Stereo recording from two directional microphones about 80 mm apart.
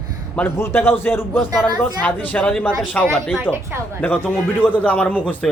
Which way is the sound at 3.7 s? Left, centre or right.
Right.